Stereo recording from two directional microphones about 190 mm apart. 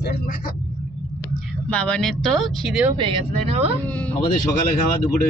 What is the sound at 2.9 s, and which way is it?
Speech, 30° right (ahead or behind).